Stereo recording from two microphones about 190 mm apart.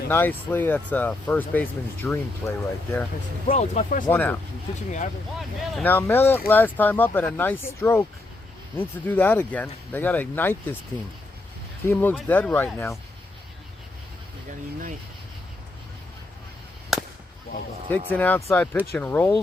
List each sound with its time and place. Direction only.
0.1 s speech: 10° left (ahead or behind)
3.5 s speech: 35° left (ahead or behind)
4.1 s speech: 10° left (ahead or behind)
5.4 s speech: centre (ahead or behind)
5.9 s speech: 10° left (ahead or behind)
11.9 s speech: 10° left (ahead or behind)
16.9 s a sound: centre (ahead or behind)
17.8 s speech: 10° left (ahead or behind)